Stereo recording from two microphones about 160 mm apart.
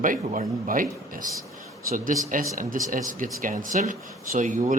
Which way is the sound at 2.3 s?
55° right (ahead or behind).